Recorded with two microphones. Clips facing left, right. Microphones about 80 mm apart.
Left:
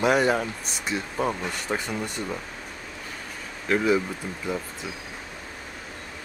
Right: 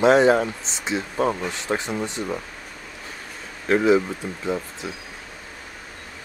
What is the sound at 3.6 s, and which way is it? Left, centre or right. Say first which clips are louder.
Speech: right 5 dB; centre.